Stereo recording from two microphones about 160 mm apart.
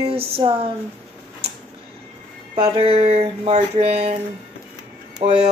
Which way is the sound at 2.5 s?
40° right (ahead or behind).